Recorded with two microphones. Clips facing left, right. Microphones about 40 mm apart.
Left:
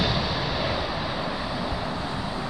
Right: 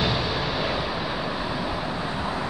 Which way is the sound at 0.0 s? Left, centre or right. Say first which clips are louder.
Right 1 dB; centre.